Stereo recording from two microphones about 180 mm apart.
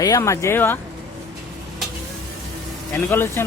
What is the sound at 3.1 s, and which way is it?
Speech, 15° left (ahead or behind).